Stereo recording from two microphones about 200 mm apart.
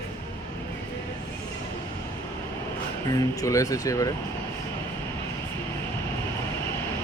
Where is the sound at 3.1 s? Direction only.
15° left (ahead or behind).